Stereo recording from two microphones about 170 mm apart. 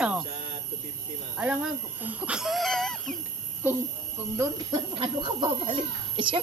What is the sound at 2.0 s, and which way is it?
Speech, 5° right (ahead or behind).